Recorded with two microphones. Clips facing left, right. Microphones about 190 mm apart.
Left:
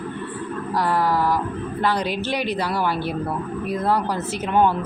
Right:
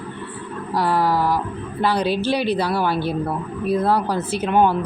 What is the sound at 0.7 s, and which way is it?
Speech, 10° right (ahead or behind).